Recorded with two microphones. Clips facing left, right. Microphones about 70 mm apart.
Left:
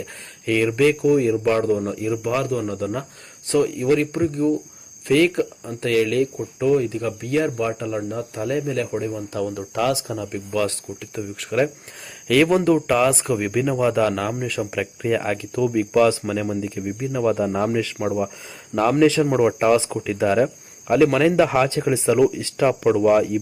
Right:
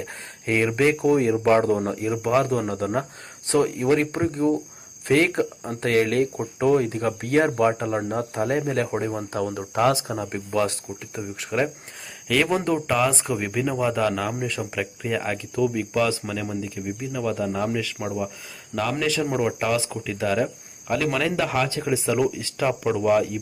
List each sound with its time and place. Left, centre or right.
0.0 s speech: right
1.6 s speech: right
10.7 s speech: right
11.3 s speech: centre
12.3 s speech: centre; by 22.2 s left
22.2 s speech: centre